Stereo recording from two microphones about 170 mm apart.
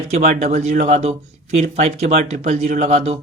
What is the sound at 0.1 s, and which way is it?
Speech, 45° right (ahead or behind).